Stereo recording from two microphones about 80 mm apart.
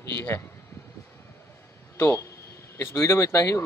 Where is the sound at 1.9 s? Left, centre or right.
Left.